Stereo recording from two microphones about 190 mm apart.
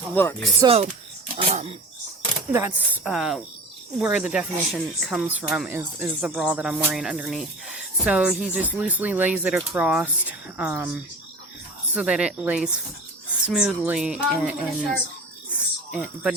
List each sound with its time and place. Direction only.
0.2 s speech: 10° left (ahead or behind)
0.6 s speech: 35° right (ahead or behind)
2.5 s speech: 10° right (ahead or behind)
15.5 s snake: 5° right (ahead or behind)